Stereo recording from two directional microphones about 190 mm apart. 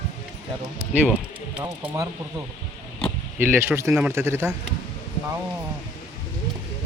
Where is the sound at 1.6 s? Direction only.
15° right (ahead or behind).